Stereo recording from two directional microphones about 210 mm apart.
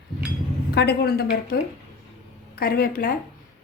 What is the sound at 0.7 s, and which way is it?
Speech, 50° left (ahead or behind).